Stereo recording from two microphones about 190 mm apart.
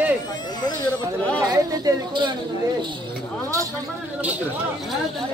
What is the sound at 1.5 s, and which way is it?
Chatter, 20° right (ahead or behind).